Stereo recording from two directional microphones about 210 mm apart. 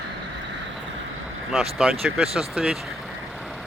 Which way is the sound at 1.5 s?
Centre (ahead or behind).